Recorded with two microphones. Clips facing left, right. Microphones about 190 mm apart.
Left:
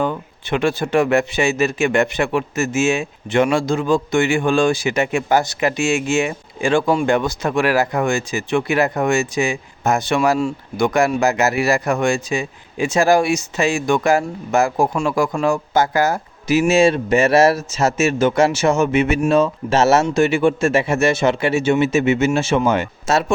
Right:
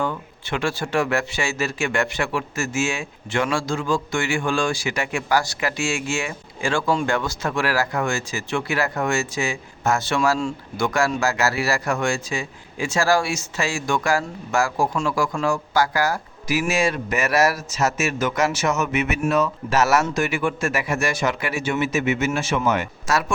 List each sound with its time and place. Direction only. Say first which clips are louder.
0.0 s a man's voice: left 4 dB; 20° left (ahead or behind)